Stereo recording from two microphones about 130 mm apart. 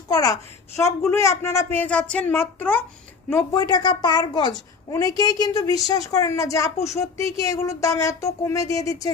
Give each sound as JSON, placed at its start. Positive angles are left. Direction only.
{"t": 0.1, "sound": "a child's voice", "side_deg": 30}
{"t": 3.5, "sound": "a woman's voice", "side_deg": 30}
{"t": 6.7, "sound": "speech", "side_deg": 60}
{"t": 7.0, "sound": "speech", "side_deg": 25}